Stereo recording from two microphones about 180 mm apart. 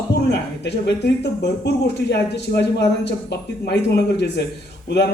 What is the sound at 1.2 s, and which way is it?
Speech, 70° left (ahead or behind).